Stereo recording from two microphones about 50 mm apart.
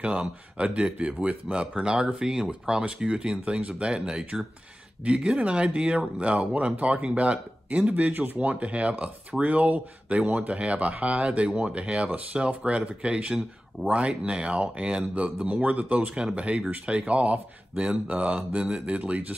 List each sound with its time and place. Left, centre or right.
0.7 s speech: right
15.4 s speech: right